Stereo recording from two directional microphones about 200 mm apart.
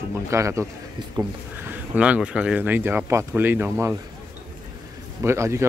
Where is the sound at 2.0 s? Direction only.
5° right (ahead or behind).